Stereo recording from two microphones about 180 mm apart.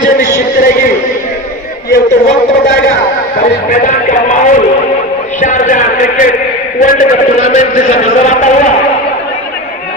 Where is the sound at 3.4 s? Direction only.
45° left (ahead or behind).